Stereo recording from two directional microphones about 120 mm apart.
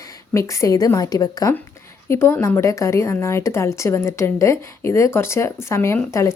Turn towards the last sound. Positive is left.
turn(degrees=25)  # may be behind; listen again after turning